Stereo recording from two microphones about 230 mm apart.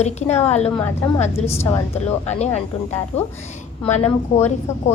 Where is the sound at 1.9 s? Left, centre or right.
Left.